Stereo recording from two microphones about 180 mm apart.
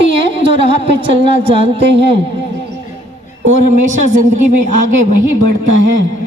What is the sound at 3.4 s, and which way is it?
Speech, 40° right (ahead or behind).